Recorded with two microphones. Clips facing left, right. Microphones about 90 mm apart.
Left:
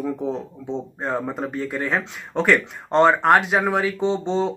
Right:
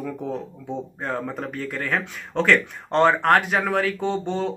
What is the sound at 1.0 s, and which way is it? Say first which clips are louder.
Speech: left 3 dB; 20° left (ahead or behind).